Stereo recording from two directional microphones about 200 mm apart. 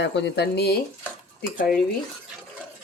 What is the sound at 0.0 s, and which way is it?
Speech, 60° left (ahead or behind).